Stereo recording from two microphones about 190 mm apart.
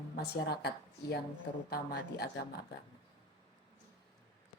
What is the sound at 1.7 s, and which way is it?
Speech, 55° left (ahead or behind).